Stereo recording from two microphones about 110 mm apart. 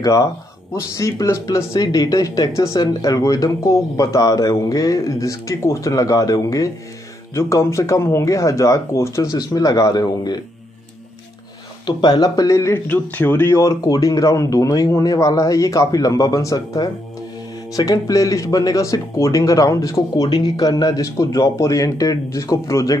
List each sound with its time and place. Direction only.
0.0 s speech: 30° left (ahead or behind)
11.8 s speech: 40° left (ahead or behind)
12.8 s speech: 15° left (ahead or behind); by 22.9 s 30° left (ahead or behind)